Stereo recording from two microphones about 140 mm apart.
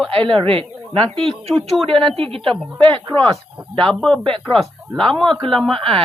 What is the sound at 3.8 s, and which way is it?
A man's voice, 5° left (ahead or behind).